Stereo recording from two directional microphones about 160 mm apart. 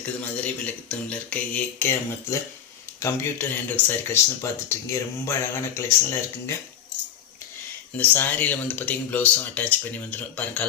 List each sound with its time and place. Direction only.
0.4 s speech: 10° left (ahead or behind)
7.9 s speech: 10° left (ahead or behind)